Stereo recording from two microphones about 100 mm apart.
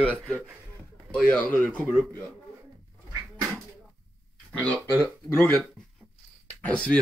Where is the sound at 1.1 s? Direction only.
10° left (ahead or behind).